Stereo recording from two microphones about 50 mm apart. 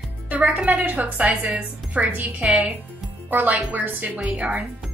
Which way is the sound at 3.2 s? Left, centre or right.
Right.